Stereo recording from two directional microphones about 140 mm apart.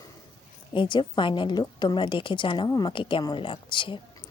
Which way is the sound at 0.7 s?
35° left (ahead or behind).